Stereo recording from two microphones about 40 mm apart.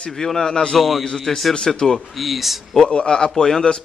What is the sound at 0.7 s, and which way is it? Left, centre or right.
Speech, centre.